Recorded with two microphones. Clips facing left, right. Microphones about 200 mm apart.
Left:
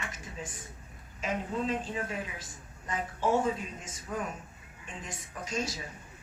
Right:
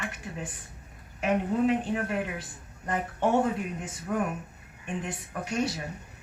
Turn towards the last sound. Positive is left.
turn(degrees=-65)  # may be behind; listen again after turning